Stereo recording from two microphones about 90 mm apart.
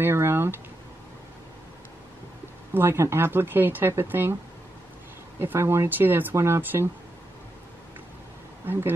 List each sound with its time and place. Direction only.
0.0 s speech: 25° right (ahead or behind)
2.7 s speech: 25° right (ahead or behind)
5.4 s speech: 25° right (ahead or behind)